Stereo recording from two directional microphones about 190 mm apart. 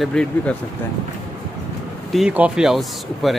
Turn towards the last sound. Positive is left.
turn(degrees=0)  # may be behind; listen again after turning